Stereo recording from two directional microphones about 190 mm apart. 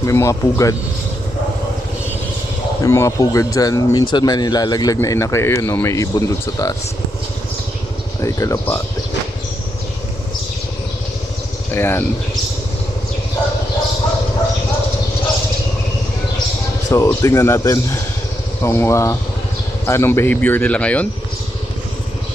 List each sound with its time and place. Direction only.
0.0 s a man's voice: 15° left (ahead or behind)
2.8 s a man's voice: 15° left (ahead or behind)
8.2 s a man's voice: 15° left (ahead or behind)
11.7 s a man's voice: 10° left (ahead or behind)
16.9 s a man's voice: 15° left (ahead or behind)